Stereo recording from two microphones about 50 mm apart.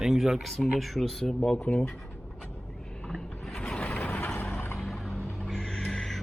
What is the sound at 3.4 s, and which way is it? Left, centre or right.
Mechanisms, centre.